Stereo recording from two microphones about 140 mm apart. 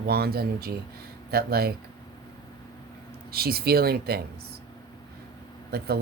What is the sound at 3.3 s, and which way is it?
Speech, 90° right.